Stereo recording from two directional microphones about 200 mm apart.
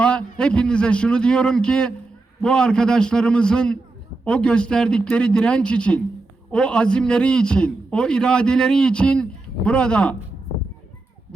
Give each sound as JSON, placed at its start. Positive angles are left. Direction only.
{"t": 0.0, "sound": "a man's voice", "side_deg": 5}